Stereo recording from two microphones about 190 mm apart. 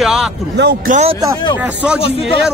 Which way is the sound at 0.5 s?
60° right (ahead or behind).